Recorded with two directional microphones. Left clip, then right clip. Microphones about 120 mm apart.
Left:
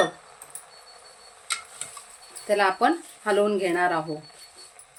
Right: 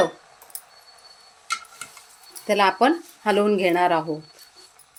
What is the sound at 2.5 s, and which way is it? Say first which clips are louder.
Speech: right 3 dB; 90° right.